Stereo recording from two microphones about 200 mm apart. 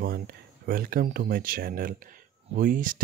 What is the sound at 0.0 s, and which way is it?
Speech, 50° right (ahead or behind).